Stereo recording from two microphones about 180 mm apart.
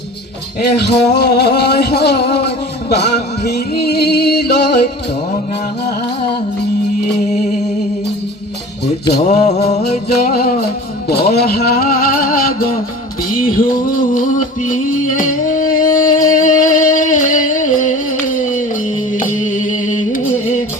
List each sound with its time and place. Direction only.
0.8 s a sound: 65° left (ahead or behind)
2.9 s music: 65° left (ahead or behind)
7.3 s music: 40° left (ahead or behind)
9.2 s music: 40° left (ahead or behind)
10.2 s a sound: 60° left (ahead or behind)
14.1 s music: 45° left (ahead or behind)